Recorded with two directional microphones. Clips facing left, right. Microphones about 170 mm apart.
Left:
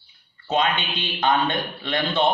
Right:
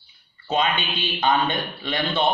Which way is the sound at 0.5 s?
5° right (ahead or behind).